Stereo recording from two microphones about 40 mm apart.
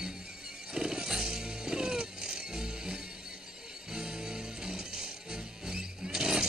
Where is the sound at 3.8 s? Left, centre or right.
Centre.